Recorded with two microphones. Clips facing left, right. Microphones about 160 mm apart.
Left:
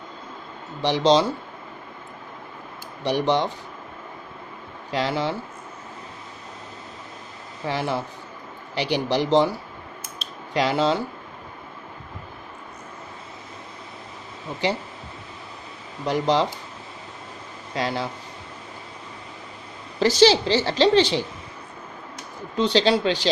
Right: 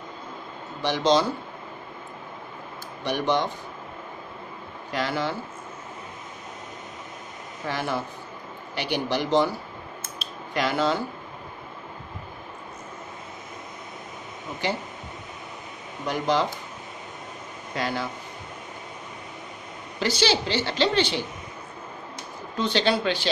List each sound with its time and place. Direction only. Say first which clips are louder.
0.8 s a woman's voice: left 3 dB; 30° left (ahead or behind)
3.1 s a woman's voice: left 3 dB; 30° left (ahead or behind)
4.9 s speech: left 3 dB; 25° left (ahead or behind)
7.6 s a woman's voice: left 3 dB; 25° left (ahead or behind)
10.5 s speech: left 3 dB; 30° left (ahead or behind)
16.1 s a woman's voice: left 3 dB; 30° left (ahead or behind)
17.7 s speech: left 2 dB; 30° left (ahead or behind)
20.0 s a woman's voice: left 7 dB; 35° left (ahead or behind)
22.6 s a woman's voice: left 4 dB; 30° left (ahead or behind)